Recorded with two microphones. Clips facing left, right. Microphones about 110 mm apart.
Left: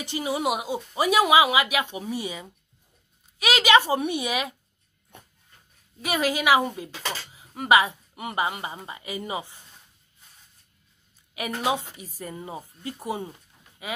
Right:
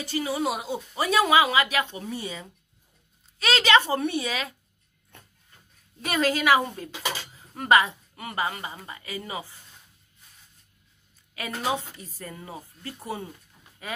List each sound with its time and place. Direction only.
0.0 s a woman's voice: 20° left (ahead or behind)
5.1 s a sound: 15° left (ahead or behind)
6.0 s a woman's voice: 10° left (ahead or behind)
6.9 s speech: 10° right (ahead or behind)
7.3 s a woman's voice: 10° left (ahead or behind)
11.3 s a woman's voice: 15° left (ahead or behind)